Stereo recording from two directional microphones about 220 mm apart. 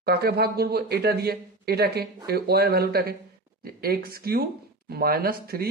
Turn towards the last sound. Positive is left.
turn(degrees=-40)  # may be behind; listen again after turning